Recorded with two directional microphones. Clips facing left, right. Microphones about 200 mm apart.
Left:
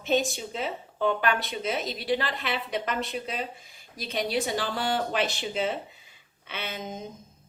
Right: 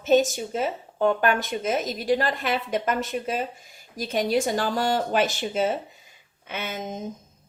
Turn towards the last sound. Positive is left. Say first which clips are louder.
# right 4 dB
turn(degrees=-45)  # may be behind; listen again after turning